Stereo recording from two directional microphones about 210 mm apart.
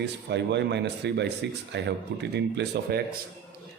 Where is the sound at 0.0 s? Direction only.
55° right (ahead or behind).